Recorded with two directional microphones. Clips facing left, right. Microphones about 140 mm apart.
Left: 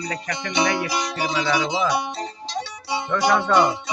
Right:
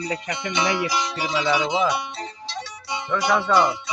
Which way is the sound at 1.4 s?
25° right (ahead or behind).